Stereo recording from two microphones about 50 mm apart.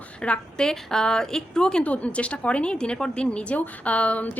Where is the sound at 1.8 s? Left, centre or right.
Left.